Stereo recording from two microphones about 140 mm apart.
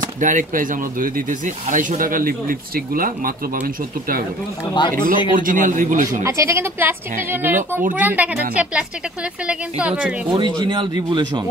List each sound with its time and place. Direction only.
0.2 s speech: 70° right (ahead or behind); by 4.2 s 90° right
4.7 s speech: 35° left (ahead or behind)
5.3 s speech: 75° right (ahead or behind)
6.2 s speech: 20° right (ahead or behind)
10.3 s speech: 35° right (ahead or behind)